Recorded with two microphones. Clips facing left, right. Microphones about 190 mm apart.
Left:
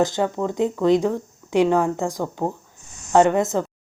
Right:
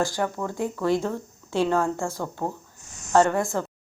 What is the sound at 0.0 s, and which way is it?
Speech, 20° left (ahead or behind).